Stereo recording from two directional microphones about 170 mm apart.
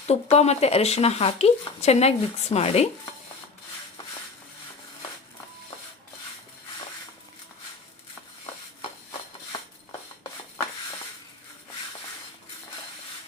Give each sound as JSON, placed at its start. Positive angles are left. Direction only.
{"t": 0.1, "sound": "speech", "side_deg": 40}